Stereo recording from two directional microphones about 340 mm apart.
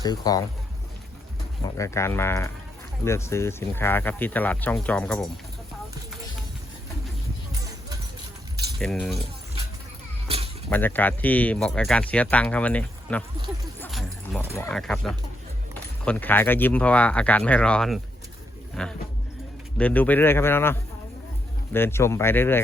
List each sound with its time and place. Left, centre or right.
0.0 s speech: centre
1.6 s speech: centre
8.8 s speech: centre
10.2 s a sound: centre
10.7 s speech: centre